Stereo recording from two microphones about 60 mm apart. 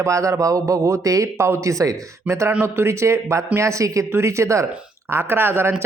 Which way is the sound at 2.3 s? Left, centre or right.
Right.